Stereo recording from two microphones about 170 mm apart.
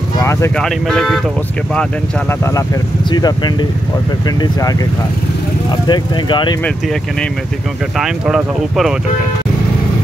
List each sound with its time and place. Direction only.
0.2 s speech: 15° left (ahead or behind)
0.6 s speech: 5° left (ahead or behind)
3.1 s speech: 25° left (ahead or behind)
5.9 s speech: 25° left (ahead or behind)
8.0 s speech: 5° right (ahead or behind)